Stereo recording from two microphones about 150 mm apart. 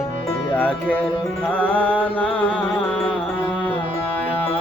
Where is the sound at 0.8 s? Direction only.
10° left (ahead or behind).